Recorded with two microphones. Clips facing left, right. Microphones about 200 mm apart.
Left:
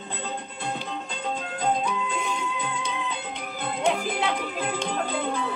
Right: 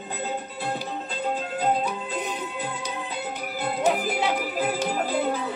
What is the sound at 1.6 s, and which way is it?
Music, 5° right (ahead or behind).